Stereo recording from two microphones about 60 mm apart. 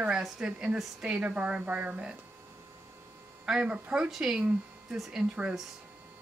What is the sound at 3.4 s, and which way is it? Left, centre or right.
Speech, centre.